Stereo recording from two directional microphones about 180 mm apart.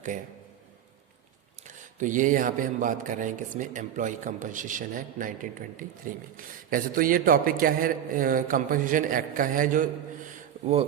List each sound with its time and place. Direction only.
1.6 s a man's voice: 45° right (ahead or behind)